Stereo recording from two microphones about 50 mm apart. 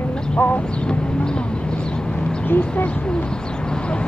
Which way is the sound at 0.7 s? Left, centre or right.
Centre.